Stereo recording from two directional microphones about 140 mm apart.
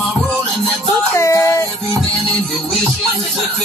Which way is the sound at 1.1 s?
20° left (ahead or behind).